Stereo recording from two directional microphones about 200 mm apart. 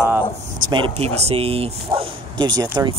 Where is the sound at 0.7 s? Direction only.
30° right (ahead or behind).